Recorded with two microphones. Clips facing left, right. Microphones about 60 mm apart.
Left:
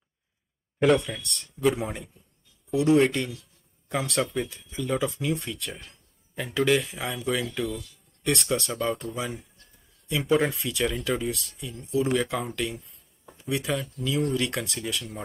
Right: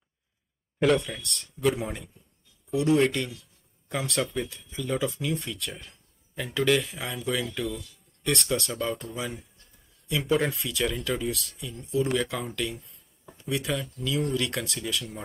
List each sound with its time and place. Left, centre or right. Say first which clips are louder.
0.7 s speech: left 2 dB; centre